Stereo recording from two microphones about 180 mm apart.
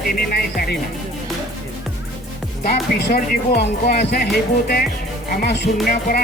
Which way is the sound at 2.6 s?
50° left (ahead or behind).